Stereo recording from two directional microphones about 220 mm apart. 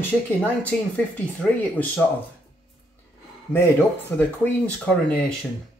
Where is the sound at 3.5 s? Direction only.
10° left (ahead or behind).